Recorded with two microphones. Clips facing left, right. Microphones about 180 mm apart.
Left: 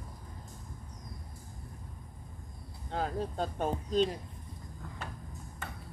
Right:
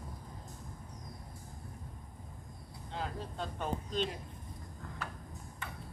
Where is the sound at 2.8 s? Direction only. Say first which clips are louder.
Left 7 dB; 45° left (ahead or behind).